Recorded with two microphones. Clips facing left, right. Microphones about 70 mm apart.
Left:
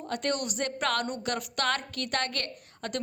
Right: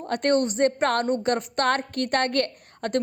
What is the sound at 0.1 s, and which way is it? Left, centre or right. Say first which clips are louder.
A woman's voice: right 9 dB; right.